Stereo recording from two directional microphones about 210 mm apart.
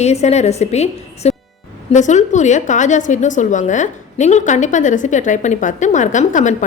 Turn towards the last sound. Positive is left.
turn(degrees=35)  # may be behind; listen again after turning